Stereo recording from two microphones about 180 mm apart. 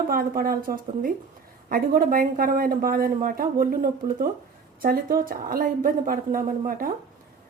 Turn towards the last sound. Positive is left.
turn(degrees=-50)  # may be behind; listen again after turning